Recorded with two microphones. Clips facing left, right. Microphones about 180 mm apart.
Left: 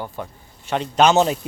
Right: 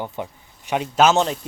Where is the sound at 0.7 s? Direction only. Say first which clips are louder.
Even; 5° right (ahead or behind).